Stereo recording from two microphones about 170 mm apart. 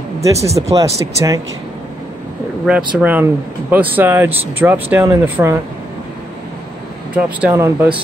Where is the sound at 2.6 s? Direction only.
5° right (ahead or behind).